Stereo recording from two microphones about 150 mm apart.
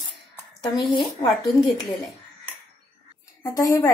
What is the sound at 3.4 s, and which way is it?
Speech, 20° left (ahead or behind).